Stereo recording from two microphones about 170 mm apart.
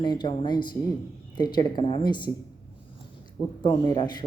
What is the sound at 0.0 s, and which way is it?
A man's voice, 25° left (ahead or behind).